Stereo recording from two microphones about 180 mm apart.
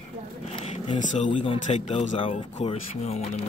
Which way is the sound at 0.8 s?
40° left (ahead or behind).